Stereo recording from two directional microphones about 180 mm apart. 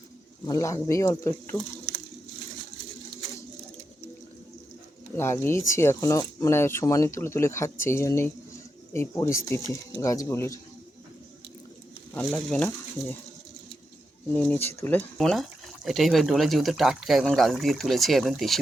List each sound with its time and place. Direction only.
0.4 s speech: 20° left (ahead or behind)
5.1 s speech: 15° left (ahead or behind)
12.5 s speech: 5° left (ahead or behind)
14.3 s speech: 10° left (ahead or behind)